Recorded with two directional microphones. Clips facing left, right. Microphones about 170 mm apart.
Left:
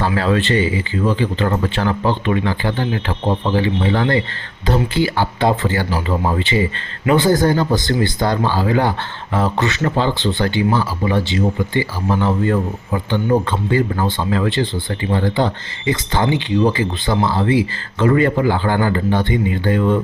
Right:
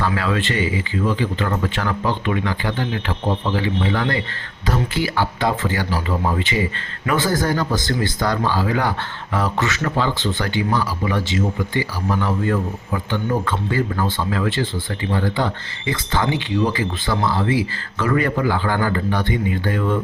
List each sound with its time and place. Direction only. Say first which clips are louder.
0.0 s speech: left 4 dB; 30° left (ahead or behind)